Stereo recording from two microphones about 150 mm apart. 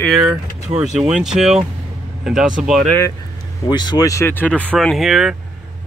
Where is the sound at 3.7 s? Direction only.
30° left (ahead or behind); by 4.6 s 10° left (ahead or behind).